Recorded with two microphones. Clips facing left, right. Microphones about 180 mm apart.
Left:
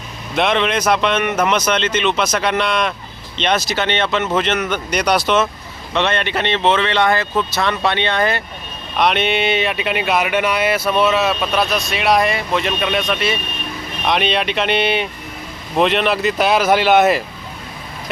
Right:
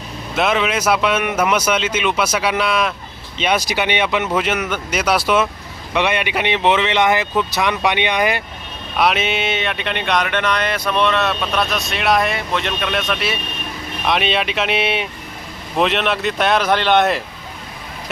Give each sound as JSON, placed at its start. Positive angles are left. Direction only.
{"t": 0.3, "sound": "speech", "side_deg": -5}
{"t": 9.0, "sound": "speech", "side_deg": 0}